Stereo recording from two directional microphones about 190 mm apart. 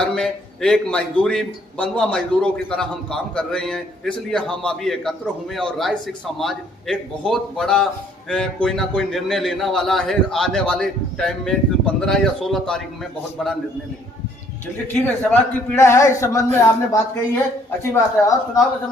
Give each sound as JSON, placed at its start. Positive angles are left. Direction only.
{"t": 0.2, "sound": "a man's voice", "side_deg": 5}
{"t": 15.0, "sound": "a man's voice", "side_deg": 10}